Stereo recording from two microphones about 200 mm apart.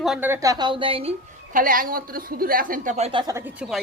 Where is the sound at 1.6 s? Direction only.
45° right (ahead or behind).